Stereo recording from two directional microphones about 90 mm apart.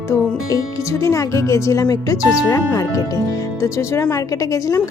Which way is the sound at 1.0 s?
35° left (ahead or behind).